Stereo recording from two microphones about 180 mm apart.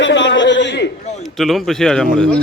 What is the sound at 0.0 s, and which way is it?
Chuckle, 85° left.